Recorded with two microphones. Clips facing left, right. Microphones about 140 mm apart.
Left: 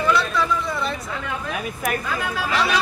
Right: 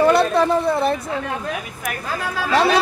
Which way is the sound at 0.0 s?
55° right (ahead or behind).